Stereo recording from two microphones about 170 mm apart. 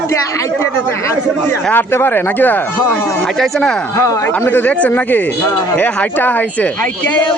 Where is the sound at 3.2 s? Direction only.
Centre (ahead or behind).